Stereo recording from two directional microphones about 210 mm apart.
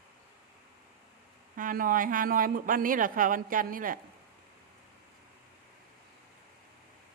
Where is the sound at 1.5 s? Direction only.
40° right (ahead or behind).